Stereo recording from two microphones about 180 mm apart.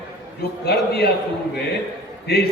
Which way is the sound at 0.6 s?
60° left (ahead or behind).